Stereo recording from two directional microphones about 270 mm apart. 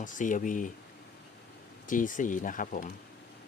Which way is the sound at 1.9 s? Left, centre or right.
Left.